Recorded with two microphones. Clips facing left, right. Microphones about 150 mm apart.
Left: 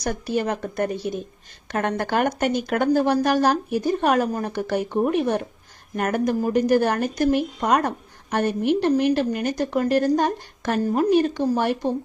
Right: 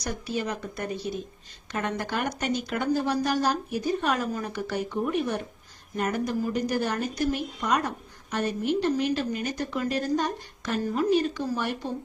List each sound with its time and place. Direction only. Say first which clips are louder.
0.0 s speech: left 6 dB; 55° left (ahead or behind)